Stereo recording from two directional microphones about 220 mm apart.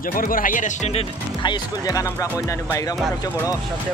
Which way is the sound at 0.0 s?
40° left (ahead or behind).